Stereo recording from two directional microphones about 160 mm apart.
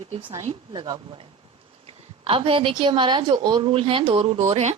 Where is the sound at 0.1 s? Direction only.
30° right (ahead or behind).